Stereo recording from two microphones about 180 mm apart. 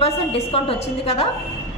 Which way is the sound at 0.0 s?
35° left (ahead or behind).